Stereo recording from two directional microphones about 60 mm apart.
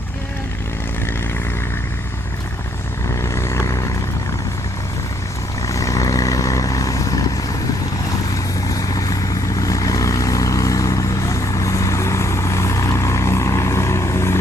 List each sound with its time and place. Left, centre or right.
3.2 s vehicle: left
5.6 s vehicle: left
8.7 s vehicle: left